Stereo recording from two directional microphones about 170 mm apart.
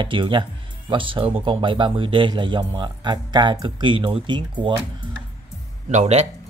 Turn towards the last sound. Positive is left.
turn(degrees=-40)  # may be behind; listen again after turning